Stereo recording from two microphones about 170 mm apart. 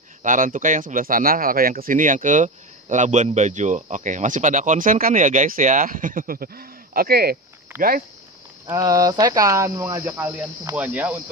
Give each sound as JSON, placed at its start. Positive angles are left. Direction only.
{"t": 0.2, "sound": "speech", "side_deg": -50}
{"t": 7.7, "sound": "speech", "side_deg": -15}